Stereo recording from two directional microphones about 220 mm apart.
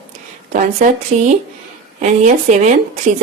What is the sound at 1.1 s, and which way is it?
A woman's voice, 30° right (ahead or behind).